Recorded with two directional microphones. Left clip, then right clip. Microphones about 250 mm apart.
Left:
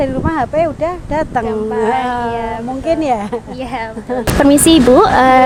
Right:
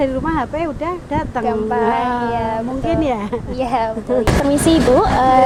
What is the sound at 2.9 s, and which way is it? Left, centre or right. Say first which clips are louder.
Speech: left 4 dB; left.